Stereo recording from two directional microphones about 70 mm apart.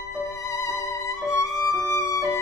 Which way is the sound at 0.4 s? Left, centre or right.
Left.